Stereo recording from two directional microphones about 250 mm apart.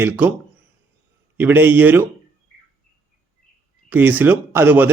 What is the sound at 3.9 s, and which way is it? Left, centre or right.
A man's voice, centre.